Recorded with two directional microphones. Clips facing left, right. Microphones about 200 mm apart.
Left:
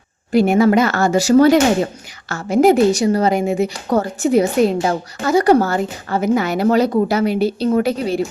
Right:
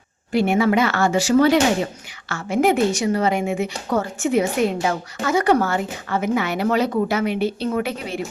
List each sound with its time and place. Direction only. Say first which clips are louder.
0.3 s a woman's voice: left 5 dB; 40° left (ahead or behind)